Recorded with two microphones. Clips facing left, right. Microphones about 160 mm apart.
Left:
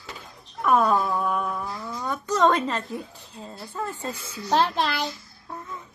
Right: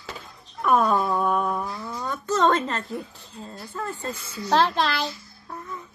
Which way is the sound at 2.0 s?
10° left (ahead or behind).